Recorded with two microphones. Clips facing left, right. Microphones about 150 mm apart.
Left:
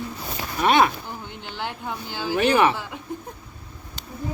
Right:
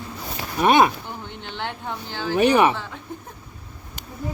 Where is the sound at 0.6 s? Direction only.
15° right (ahead or behind).